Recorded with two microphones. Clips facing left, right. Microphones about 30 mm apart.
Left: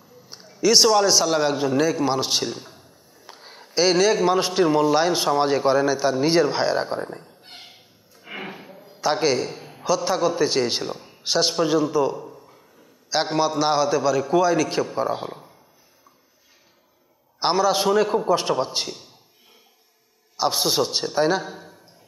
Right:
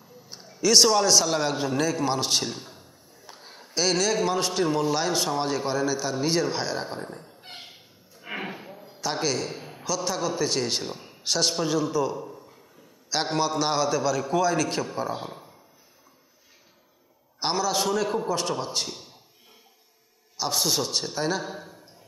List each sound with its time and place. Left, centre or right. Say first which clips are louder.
0.3 s a man's voice: left 3 dB; centre
3.3 s a man's voice: left 2 dB; centre
7.2 s a sound: right 1 dB; centre
9.0 s a man's voice: left 6 dB; centre
9.5 s a sound: left 1 dB; centre
9.8 s a man's voice: left 7 dB; centre
11.2 s a man's voice: left 4 dB; centre
12.2 s a sound: even; centre
13.1 s a man's voice: left 4 dB; centre
17.4 s a man's voice: left 6 dB; centre
18.3 s a man's voice: left 6 dB; centre
18.9 s speech: left 3 dB; centre
20.3 s a man's voice: left 5 dB; left
21.5 s a sound: even; centre